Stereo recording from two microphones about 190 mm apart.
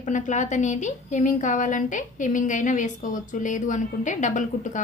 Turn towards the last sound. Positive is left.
turn(degrees=40)  # may be behind; listen again after turning